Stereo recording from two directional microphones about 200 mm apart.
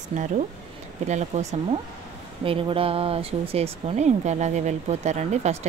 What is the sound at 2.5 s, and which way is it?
A woman's voice, 25° right (ahead or behind).